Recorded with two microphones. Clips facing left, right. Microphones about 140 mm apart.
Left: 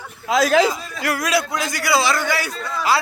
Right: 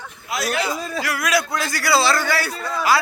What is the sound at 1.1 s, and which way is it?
Speech, 30° left (ahead or behind).